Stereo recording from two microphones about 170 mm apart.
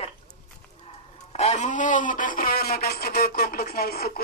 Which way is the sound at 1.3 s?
40° left (ahead or behind).